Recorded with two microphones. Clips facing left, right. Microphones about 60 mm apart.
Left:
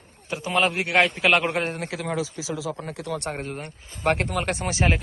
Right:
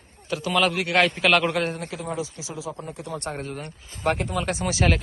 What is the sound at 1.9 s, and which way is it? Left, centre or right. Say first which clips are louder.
Speech: left 2 dB; left.